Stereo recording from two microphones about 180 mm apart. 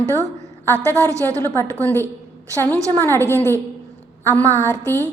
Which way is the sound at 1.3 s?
10° left (ahead or behind).